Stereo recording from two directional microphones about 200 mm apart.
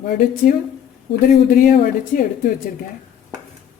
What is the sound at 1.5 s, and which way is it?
Speech, 45° left (ahead or behind).